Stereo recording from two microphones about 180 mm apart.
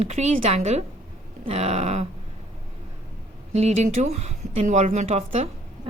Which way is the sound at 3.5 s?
35° right (ahead or behind).